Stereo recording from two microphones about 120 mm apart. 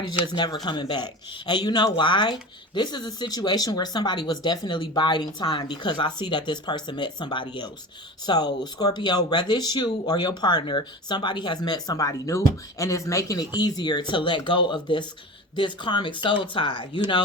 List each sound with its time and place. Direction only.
0.3 s speech: 35° left (ahead or behind)